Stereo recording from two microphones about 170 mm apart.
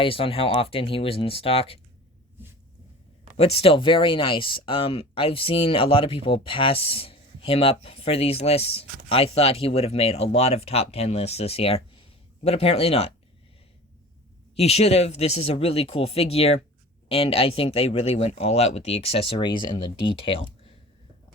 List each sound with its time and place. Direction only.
0.0 s speech: 35° left (ahead or behind)
3.3 s speech: 35° left (ahead or behind)
14.5 s speech: 40° left (ahead or behind)